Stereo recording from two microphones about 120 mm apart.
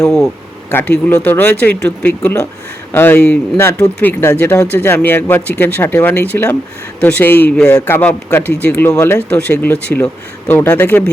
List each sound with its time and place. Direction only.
0.0 s speech: centre (ahead or behind)
0.7 s speech: 20° left (ahead or behind)
7.7 s speech: 20° left (ahead or behind)